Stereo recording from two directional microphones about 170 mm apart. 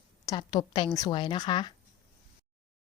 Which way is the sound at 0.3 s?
25° left (ahead or behind).